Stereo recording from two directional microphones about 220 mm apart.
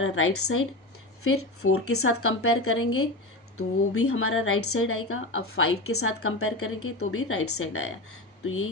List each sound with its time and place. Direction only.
0.0 s a woman's voice: 75° left (ahead or behind)